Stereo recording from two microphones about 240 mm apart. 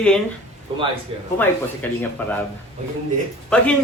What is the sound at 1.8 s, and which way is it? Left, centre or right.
Speech, centre.